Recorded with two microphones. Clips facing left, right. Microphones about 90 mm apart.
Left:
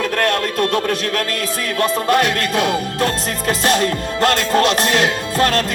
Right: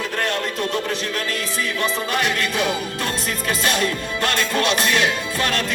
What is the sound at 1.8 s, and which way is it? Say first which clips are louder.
Music: left 8 dB; 55° left (ahead or behind).